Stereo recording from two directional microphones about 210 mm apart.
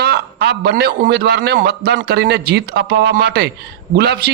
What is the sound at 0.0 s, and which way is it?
A man's voice, 55° right (ahead or behind).